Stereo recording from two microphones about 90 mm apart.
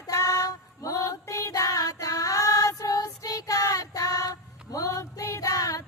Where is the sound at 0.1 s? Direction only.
40° left (ahead or behind).